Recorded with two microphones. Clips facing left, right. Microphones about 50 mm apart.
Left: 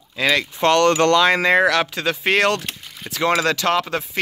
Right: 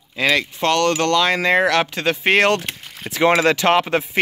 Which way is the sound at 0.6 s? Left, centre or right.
Centre.